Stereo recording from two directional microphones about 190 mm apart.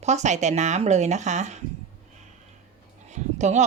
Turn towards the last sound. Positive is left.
turn(degrees=-40)  # may be behind; listen again after turning